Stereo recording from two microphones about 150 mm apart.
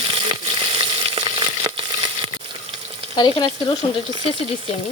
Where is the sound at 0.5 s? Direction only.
35° right (ahead or behind).